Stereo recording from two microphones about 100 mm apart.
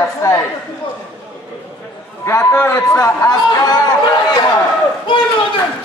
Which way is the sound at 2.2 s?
25° left (ahead or behind).